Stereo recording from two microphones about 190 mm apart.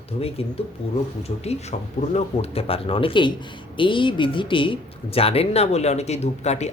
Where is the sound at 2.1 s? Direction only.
30° left (ahead or behind).